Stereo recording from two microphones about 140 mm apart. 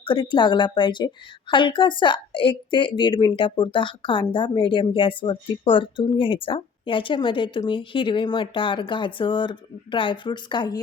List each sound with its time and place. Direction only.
0.0 s a woman's voice: 35° left (ahead or behind)